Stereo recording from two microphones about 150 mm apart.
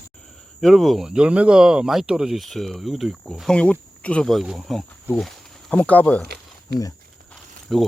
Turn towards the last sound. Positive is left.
turn(degrees=0)  # may be behind; listen again after turning